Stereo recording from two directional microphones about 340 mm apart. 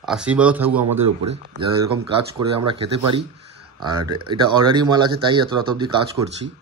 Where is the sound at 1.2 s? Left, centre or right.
Centre.